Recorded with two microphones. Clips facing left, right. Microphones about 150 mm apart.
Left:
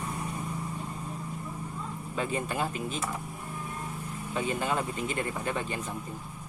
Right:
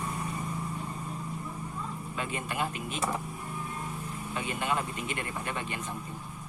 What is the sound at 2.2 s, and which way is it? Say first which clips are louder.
Speech: left 3 dB; 35° left (ahead or behind).